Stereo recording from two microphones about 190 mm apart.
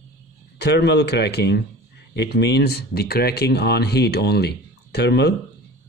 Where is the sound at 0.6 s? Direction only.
60° left (ahead or behind).